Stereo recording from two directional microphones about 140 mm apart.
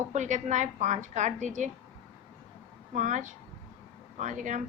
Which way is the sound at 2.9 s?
65° right (ahead or behind).